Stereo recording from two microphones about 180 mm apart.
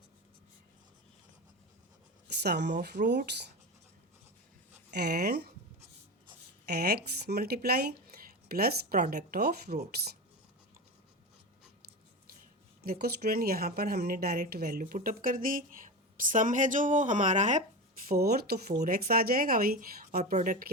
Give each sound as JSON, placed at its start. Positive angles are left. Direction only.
{"t": 2.4, "sound": "speech", "side_deg": -65}
{"t": 4.9, "sound": "speech", "side_deg": -65}
{"t": 6.7, "sound": "speech", "side_deg": -60}
{"t": 12.8, "sound": "speech", "side_deg": -60}
{"t": 18.1, "sound": "speech", "side_deg": -60}
{"t": 18.7, "sound": "speech", "side_deg": -50}